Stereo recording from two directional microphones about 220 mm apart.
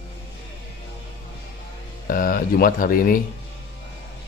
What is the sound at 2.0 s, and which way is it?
Speech, 40° left (ahead or behind).